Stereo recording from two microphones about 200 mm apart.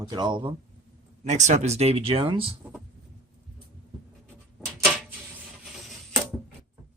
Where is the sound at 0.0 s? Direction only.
20° right (ahead or behind).